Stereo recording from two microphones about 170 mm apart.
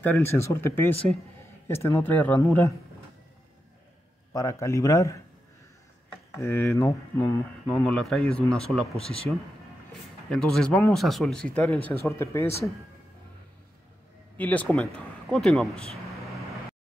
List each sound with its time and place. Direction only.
0.0 s a man's voice: 15° left (ahead or behind)
4.3 s speech: 20° left (ahead or behind)
6.4 s a man's voice: 15° left (ahead or behind)
7.6 s speech: centre (ahead or behind)
10.3 s a man's voice: 5° left (ahead or behind)
14.3 s speech: 10° left (ahead or behind)